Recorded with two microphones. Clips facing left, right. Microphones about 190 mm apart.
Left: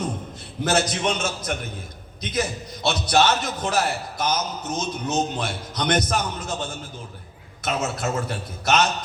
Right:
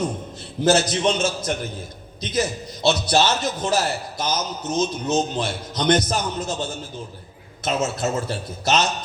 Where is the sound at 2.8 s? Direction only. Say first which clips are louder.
Right 1 dB; 30° right (ahead or behind).